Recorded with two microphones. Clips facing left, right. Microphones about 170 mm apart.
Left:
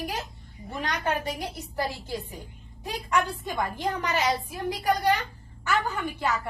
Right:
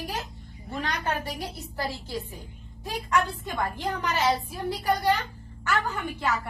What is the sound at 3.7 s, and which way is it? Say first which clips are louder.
A woman's voice: left 1 dB; 15° left (ahead or behind).